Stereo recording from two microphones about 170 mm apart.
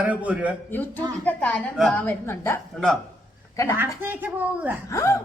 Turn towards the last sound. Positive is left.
turn(degrees=15)  # may be behind; listen again after turning